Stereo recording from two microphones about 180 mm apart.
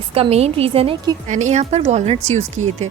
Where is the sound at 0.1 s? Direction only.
35° right (ahead or behind).